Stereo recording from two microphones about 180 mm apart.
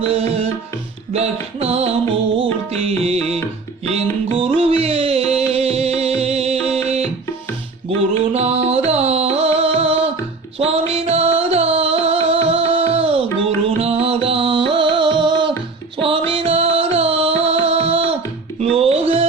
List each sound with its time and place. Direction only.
0.0 s music: 35° right (ahead or behind)